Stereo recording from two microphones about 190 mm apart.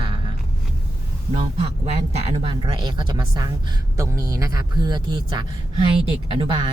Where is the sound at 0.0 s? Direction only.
25° right (ahead or behind).